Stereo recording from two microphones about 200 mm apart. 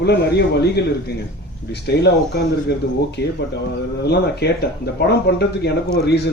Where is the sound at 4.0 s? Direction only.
55° left (ahead or behind).